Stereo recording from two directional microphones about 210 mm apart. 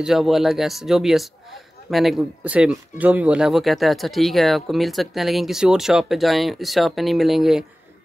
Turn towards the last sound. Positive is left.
turn(degrees=0)  # may be behind; listen again after turning